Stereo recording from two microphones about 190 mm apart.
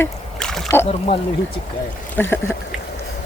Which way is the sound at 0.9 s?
30° left (ahead or behind).